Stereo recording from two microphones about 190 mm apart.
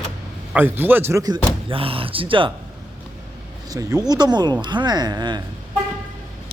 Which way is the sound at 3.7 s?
20° right (ahead or behind).